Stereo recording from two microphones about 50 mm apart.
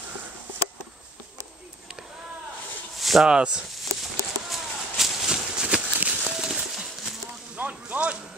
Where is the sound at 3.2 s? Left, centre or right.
Centre.